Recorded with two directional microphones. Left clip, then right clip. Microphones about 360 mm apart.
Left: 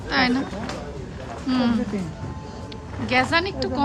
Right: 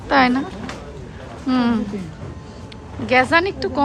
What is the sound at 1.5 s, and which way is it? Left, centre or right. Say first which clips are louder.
Speech: right 4 dB; centre.